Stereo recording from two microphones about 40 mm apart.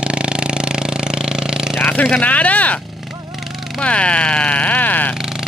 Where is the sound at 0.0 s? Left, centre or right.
Right.